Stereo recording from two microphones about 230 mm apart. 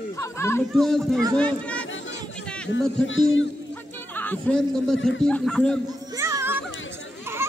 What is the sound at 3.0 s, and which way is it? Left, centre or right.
Speech, left.